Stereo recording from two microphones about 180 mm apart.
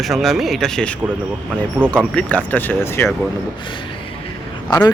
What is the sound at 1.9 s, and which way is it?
Speech, 5° left (ahead or behind).